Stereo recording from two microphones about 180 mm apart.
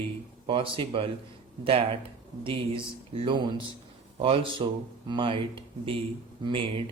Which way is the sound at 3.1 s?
25° right (ahead or behind).